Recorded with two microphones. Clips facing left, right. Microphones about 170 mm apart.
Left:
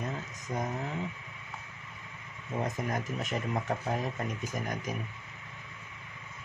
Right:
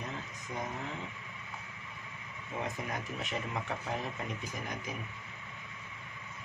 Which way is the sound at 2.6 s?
40° left (ahead or behind).